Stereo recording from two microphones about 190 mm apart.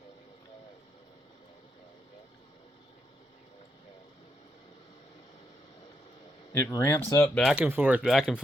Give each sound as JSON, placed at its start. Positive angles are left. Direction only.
{"t": 6.7, "sound": "speech", "side_deg": 15}
{"t": 7.4, "sound": "speech", "side_deg": -5}